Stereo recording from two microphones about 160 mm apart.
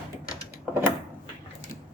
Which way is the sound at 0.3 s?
10° right (ahead or behind).